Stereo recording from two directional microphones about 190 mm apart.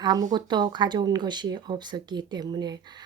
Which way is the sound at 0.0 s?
20° right (ahead or behind).